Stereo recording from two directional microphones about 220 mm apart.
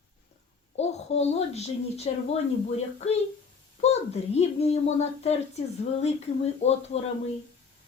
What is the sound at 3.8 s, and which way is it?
A child's voice, 30° left (ahead or behind).